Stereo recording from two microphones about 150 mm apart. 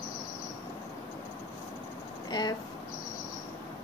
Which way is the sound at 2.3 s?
30° left (ahead or behind).